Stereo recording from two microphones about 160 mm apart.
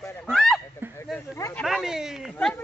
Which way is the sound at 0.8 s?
15° right (ahead or behind).